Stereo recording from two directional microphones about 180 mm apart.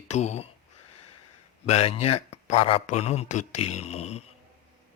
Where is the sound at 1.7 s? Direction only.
35° left (ahead or behind).